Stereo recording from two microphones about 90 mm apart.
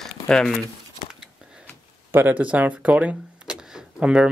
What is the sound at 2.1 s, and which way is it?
Speech, 20° right (ahead or behind).